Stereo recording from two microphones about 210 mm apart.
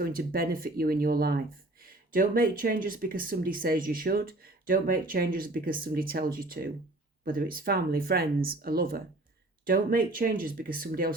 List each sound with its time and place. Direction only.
0.0 s speech: 45° right (ahead or behind)